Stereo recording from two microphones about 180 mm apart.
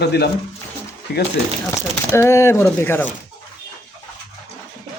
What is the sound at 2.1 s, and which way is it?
Speech, 15° left (ahead or behind).